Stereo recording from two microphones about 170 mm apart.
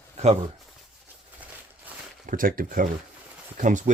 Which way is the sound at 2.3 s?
55° right (ahead or behind).